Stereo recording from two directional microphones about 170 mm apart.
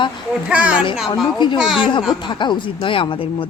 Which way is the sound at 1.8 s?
30° left (ahead or behind).